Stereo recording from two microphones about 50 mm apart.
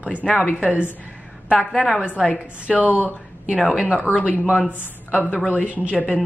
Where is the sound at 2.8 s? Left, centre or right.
Right.